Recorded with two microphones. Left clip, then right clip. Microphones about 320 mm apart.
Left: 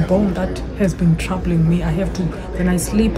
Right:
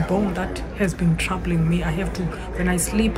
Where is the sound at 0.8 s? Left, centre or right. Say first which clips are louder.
Left 3 dB; centre.